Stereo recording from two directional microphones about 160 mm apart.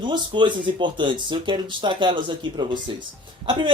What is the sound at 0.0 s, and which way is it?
Speech, 30° right (ahead or behind).